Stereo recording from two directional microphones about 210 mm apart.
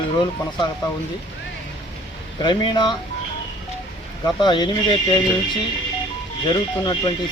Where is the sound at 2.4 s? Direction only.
20° left (ahead or behind).